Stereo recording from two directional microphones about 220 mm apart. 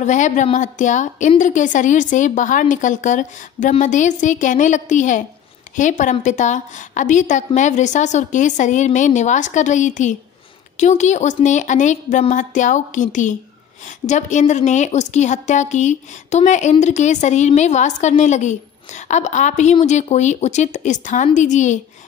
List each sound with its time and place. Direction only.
0.0 s a woman's voice: 35° left (ahead or behind)